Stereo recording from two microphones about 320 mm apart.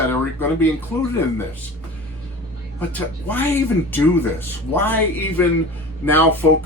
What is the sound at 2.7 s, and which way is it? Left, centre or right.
Speech, centre.